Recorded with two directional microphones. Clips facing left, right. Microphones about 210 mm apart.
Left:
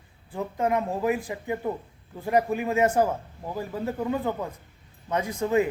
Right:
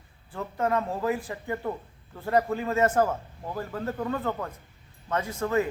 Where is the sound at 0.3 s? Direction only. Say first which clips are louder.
Left 2 dB; 15° left (ahead or behind).